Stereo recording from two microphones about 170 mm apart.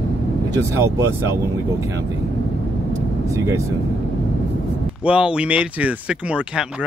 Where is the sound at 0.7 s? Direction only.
15° right (ahead or behind).